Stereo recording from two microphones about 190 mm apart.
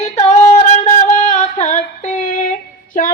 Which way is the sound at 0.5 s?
35° left (ahead or behind).